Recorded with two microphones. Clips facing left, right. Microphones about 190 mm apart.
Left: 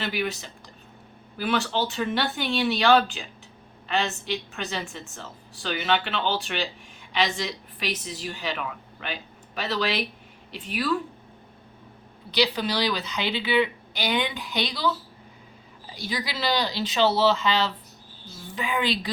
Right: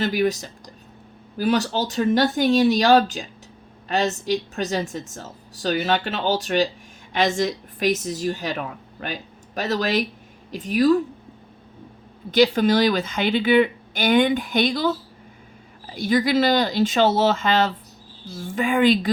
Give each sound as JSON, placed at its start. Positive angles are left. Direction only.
{"t": 0.0, "sound": "a woman's voice", "side_deg": -40}
{"t": 12.3, "sound": "speech", "side_deg": -50}
{"t": 16.0, "sound": "speech", "side_deg": -50}